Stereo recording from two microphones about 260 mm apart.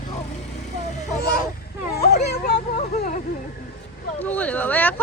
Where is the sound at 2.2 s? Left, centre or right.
Left.